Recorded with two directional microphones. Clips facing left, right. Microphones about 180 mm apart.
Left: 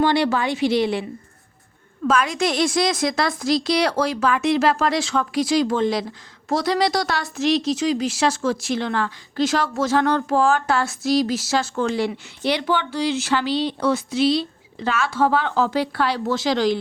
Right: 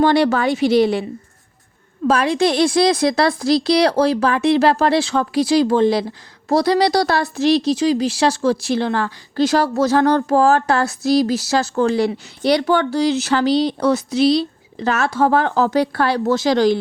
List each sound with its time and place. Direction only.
0.0 s a woman's voice: 40° right (ahead or behind)
2.0 s a woman's voice: 35° right (ahead or behind)